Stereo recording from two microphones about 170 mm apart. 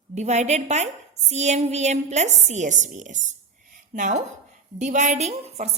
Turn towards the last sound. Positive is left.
turn(degrees=-40)  # may be behind; listen again after turning